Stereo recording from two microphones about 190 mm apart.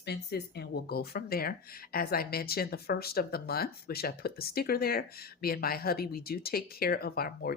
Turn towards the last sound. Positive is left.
turn(degrees=55)  # may be behind; listen again after turning